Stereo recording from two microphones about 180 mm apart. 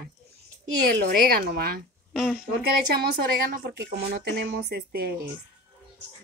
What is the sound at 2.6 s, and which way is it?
A woman's voice, 60° right (ahead or behind).